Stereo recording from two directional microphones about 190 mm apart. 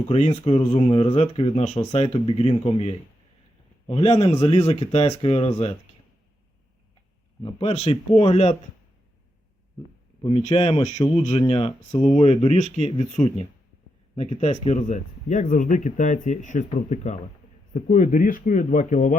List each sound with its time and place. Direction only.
0.1 s speech: 35° left (ahead or behind)
7.4 s speech: 30° left (ahead or behind)
10.2 s speech: 25° left (ahead or behind)